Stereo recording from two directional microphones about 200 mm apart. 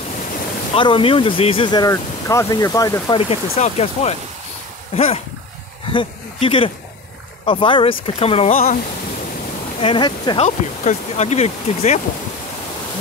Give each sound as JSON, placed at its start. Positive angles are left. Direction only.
{"t": 0.7, "sound": "speech", "side_deg": 25}
{"t": 8.5, "sound": "speech", "side_deg": 40}
{"t": 9.8, "sound": "speech", "side_deg": 25}
{"t": 10.4, "sound": "speech", "side_deg": 35}